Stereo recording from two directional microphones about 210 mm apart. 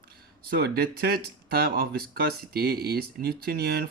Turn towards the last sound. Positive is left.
turn(degrees=-50)  # may be behind; listen again after turning